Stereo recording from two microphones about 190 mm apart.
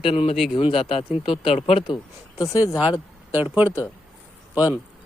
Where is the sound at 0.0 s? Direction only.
30° left (ahead or behind).